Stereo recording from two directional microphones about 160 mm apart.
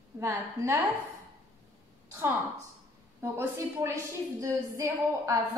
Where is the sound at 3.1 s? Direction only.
15° right (ahead or behind).